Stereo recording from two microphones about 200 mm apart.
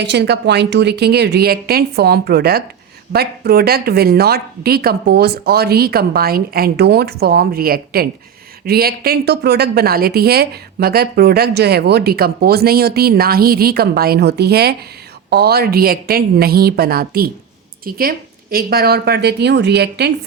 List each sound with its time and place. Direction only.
0.0 s a woman's voice: 55° right (ahead or behind)